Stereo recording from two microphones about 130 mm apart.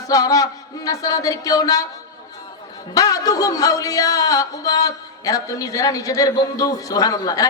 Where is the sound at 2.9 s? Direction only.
25° left (ahead or behind).